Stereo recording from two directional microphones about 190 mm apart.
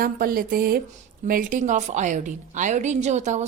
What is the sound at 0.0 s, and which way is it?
A woman's voice, 50° right (ahead or behind).